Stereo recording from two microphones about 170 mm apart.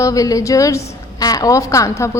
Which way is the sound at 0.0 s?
20° left (ahead or behind).